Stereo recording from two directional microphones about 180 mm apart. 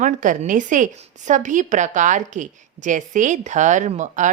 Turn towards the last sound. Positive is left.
turn(degrees=-40)  # may be behind; listen again after turning